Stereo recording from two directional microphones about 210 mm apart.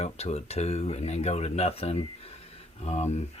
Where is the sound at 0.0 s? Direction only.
30° left (ahead or behind).